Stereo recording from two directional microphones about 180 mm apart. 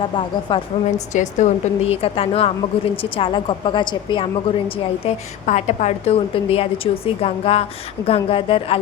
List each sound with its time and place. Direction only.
0.2 s a woman's voice: 30° left (ahead or behind)
1.1 s a woman's voice: 40° left (ahead or behind); by 4.3 s 25° left (ahead or behind)
5.0 s a woman's voice: 40° left (ahead or behind)